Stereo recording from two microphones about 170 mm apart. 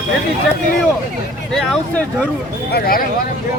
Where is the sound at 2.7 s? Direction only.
60° left (ahead or behind).